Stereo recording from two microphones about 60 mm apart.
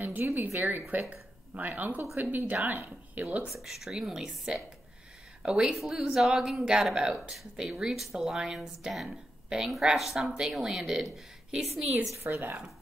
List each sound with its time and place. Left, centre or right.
0.2 s a woman's voice: right
3.4 s a woman's voice: centre
12.2 s a woman's voice: right